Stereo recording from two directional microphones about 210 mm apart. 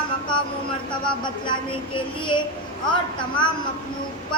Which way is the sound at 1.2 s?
20° left (ahead or behind).